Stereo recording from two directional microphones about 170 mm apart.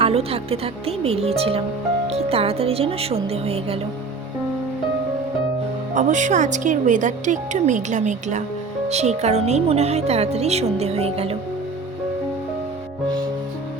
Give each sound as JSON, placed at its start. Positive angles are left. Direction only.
{"t": 0.0, "sound": "a woman's voice", "side_deg": -35}
{"t": 5.9, "sound": "a woman's voice", "side_deg": -45}